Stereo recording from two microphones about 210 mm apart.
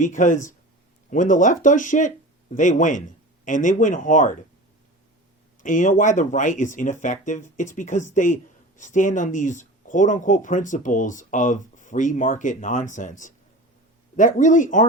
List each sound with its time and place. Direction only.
0.0 s speech: 35° left (ahead or behind)
5.6 s speech: 40° left (ahead or behind)